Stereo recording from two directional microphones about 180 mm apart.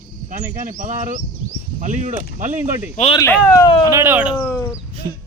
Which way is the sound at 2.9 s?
35° left (ahead or behind).